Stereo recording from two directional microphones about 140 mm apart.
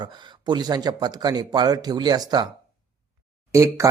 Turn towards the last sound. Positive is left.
turn(degrees=-20)  # may be behind; listen again after turning